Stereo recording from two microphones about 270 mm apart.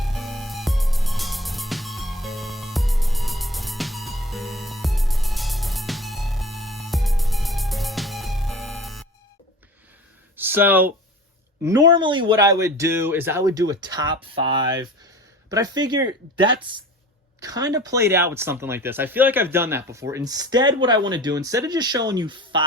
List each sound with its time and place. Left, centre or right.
0.0 s music: centre
10.3 s a sound: centre
11.6 s speech: centre